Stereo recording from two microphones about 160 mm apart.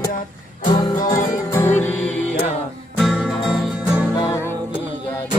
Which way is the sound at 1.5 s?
15° left (ahead or behind).